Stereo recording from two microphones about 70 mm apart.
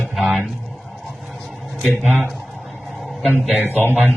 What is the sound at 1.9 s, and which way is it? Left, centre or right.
Speech, left.